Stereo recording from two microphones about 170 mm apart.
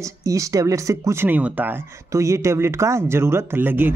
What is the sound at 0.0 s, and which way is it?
Speech, 20° right (ahead or behind).